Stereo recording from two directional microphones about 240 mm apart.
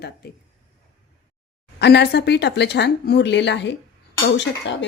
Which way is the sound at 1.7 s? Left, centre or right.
Left.